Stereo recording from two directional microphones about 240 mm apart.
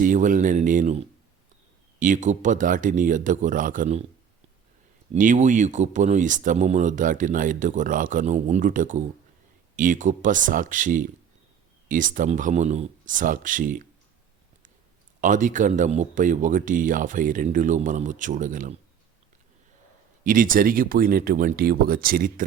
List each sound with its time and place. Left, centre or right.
0.0 s speech: right
5.1 s speech: right
15.2 s speech: right
20.2 s speech: right